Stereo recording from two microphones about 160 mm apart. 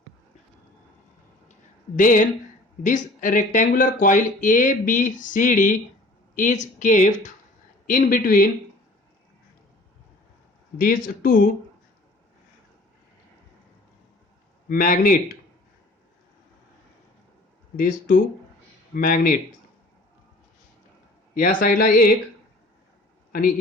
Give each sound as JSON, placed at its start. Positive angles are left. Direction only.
{"t": 2.0, "sound": "speech", "side_deg": 55}
{"t": 7.9, "sound": "speech", "side_deg": 60}
{"t": 10.8, "sound": "speech", "side_deg": 65}
{"t": 14.7, "sound": "speech", "side_deg": 60}
{"t": 17.7, "sound": "speech", "side_deg": 60}
{"t": 21.3, "sound": "speech", "side_deg": 60}